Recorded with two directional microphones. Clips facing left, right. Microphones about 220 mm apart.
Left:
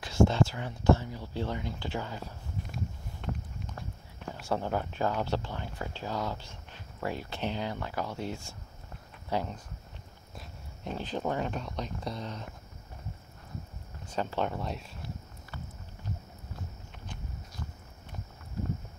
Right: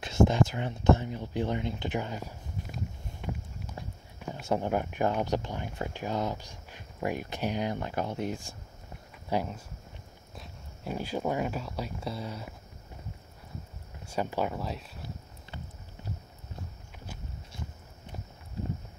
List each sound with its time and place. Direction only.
0.0 s speech: 20° right (ahead or behind)
10.3 s dog: centre (ahead or behind)
10.9 s speech: 10° right (ahead or behind)
14.0 s speech: 10° right (ahead or behind)